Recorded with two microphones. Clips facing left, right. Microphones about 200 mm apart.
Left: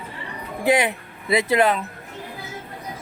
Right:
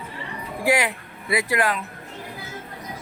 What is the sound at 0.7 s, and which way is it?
Speech, 20° left (ahead or behind).